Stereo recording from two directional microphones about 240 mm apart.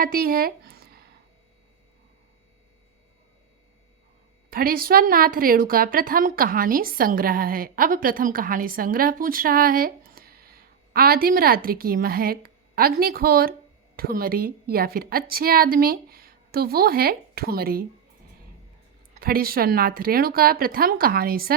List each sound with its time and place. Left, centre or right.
0.0 s a sound: right
4.5 s a woman's voice: right
19.2 s a woman's voice: right